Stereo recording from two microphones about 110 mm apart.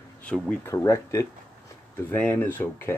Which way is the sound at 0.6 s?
25° left (ahead or behind).